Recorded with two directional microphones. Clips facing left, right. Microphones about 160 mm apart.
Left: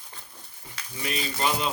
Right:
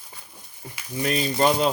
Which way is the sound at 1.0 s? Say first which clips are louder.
Right 7 dB; 40° right (ahead or behind).